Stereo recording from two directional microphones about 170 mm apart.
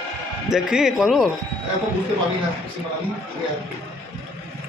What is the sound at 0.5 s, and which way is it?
Speech, 5° right (ahead or behind).